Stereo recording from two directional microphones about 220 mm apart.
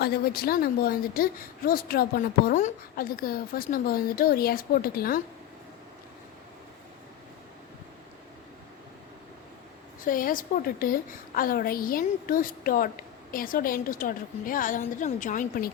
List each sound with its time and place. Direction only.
0.0 s a woman's voice: 45° left (ahead or behind)
10.0 s a woman's voice: 40° left (ahead or behind)